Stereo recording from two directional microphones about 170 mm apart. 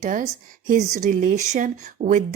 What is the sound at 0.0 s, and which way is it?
Speech, 45° right (ahead or behind).